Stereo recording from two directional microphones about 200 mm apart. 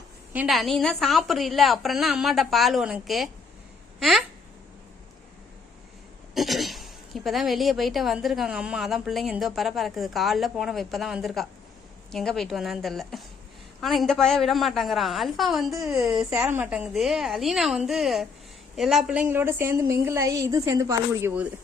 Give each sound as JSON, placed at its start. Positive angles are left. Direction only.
{"t": 0.3, "sound": "a woman's voice", "side_deg": 0}
{"t": 6.3, "sound": "a woman's voice", "side_deg": 0}
{"t": 15.7, "sound": "a woman's voice", "side_deg": -15}
{"t": 16.0, "sound": "a woman's voice", "side_deg": -5}